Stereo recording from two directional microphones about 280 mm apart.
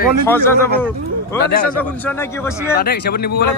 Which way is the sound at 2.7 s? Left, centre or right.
Left.